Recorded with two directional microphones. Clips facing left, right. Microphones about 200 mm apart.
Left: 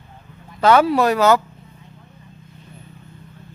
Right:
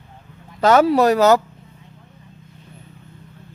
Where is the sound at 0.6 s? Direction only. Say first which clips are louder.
Right 1 dB; 40° right (ahead or behind).